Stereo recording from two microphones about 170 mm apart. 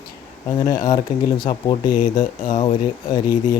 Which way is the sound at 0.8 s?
25° left (ahead or behind).